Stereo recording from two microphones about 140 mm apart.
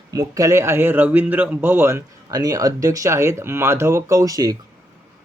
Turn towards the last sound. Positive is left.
turn(degrees=-25)  # may be behind; listen again after turning